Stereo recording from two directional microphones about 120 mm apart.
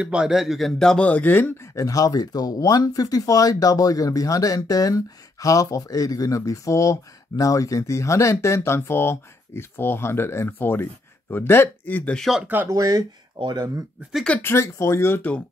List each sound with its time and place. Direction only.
0.0 s a man's voice: 10° right (ahead or behind); by 12.3 s 10° left (ahead or behind)
12.6 s speech: 30° right (ahead or behind)
14.2 s a man's voice: 15° left (ahead or behind)